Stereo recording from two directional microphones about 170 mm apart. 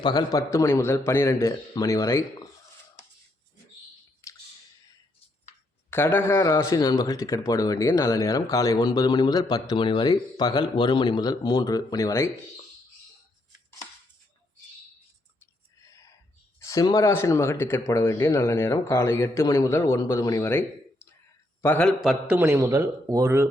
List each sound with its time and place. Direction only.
0.0 s speech: 25° left (ahead or behind)
5.9 s speech: 15° left (ahead or behind)
15.8 s a sound: 20° left (ahead or behind)
16.6 s speech: 20° left (ahead or behind)
22.0 s a man's voice: 5° right (ahead or behind)